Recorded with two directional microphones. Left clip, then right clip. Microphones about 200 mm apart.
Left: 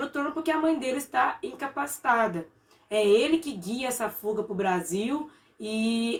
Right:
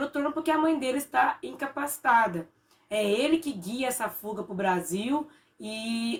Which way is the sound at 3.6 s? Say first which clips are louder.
Even; 15° right (ahead or behind).